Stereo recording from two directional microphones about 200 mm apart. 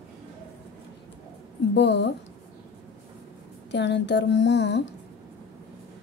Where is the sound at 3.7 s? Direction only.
60° left (ahead or behind).